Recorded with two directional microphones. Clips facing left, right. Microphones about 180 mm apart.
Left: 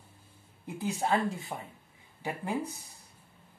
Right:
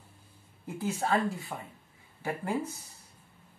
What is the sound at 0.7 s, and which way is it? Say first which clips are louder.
Speech: even; 15° left (ahead or behind).